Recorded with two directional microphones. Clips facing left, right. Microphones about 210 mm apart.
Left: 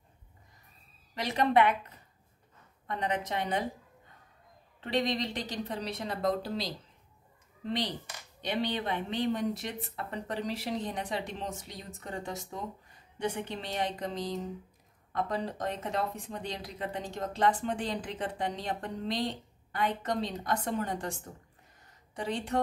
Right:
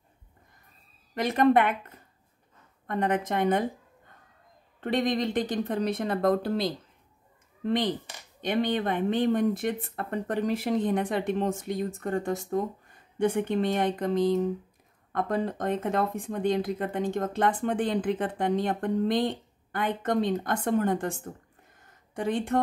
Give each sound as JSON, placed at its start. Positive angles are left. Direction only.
{"t": 1.1, "sound": "speech", "side_deg": -50}
{"t": 2.9, "sound": "speech", "side_deg": -50}
{"t": 4.7, "sound": "speech", "side_deg": -50}
{"t": 21.8, "sound": "a sound", "side_deg": -50}